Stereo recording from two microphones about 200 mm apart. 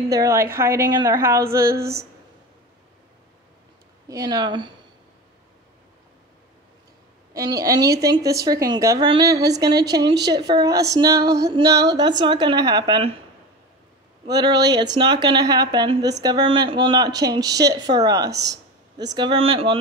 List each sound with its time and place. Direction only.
0.1 s speech: 15° right (ahead or behind)
4.1 s speech: 20° right (ahead or behind)
7.3 s speech: 15° right (ahead or behind)
14.2 s speech: 20° right (ahead or behind)